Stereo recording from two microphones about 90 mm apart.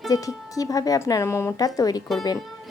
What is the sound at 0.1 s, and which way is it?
Speech, 40° left (ahead or behind).